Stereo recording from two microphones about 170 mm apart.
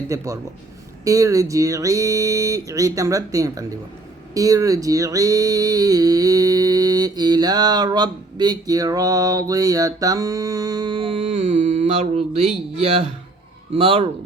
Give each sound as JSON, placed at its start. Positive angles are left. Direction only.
{"t": 0.1, "sound": "speech", "side_deg": -20}
{"t": 1.0, "sound": "a sound", "side_deg": -20}
{"t": 12.7, "sound": "speech", "side_deg": -35}